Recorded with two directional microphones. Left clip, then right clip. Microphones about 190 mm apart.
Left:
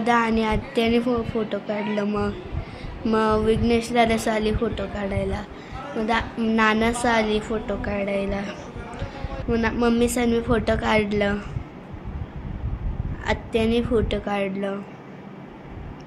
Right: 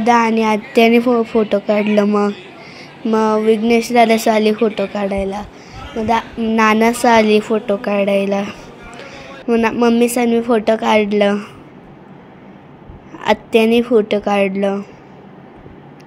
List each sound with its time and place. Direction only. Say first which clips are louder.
0.0 s a woman's voice: right 8 dB; 30° right (ahead or behind)
2.0 s a woman's voice: right 10 dB; 20° right (ahead or behind)
6.5 s a woman's voice: right 8 dB; 35° right (ahead or behind)
13.2 s a woman's voice: right 10 dB; 35° right (ahead or behind)